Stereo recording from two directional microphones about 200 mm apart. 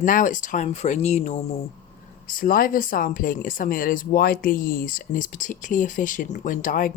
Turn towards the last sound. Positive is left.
turn(degrees=45)  # may be behind; listen again after turning